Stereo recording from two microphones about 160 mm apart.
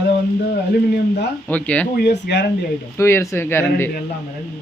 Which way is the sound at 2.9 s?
15° left (ahead or behind).